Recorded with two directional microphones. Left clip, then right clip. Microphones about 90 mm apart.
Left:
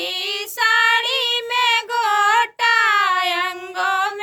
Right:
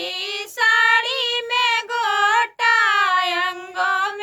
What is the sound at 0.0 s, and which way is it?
Child singing, 30° left (ahead or behind).